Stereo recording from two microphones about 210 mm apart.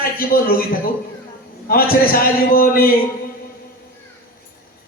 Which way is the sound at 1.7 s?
45° left (ahead or behind).